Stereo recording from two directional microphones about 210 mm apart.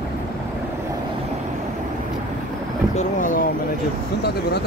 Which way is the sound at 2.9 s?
35° left (ahead or behind).